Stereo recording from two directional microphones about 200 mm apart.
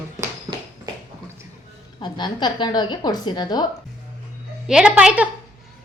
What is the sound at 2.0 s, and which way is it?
A woman's voice, 20° left (ahead or behind).